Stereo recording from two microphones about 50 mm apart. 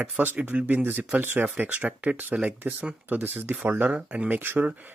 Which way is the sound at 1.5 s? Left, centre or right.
Right.